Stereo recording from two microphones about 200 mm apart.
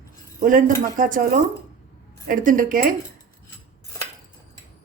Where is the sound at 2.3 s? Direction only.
40° right (ahead or behind).